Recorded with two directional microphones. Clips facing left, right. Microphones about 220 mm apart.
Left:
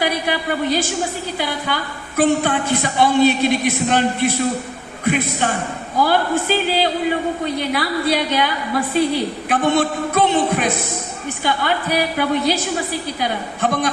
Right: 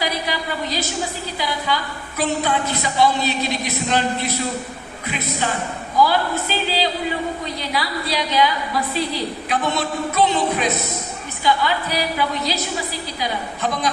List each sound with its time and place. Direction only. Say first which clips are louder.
0.0 s a sound: left 4 dB; 55° left (ahead or behind)
1.4 s a man's voice: right 1 dB; 55° left (ahead or behind)
6.0 s a woman's voice: left 1 dB; 55° left (ahead or behind)